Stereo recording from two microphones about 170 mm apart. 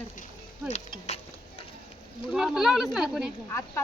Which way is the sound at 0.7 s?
40° left (ahead or behind).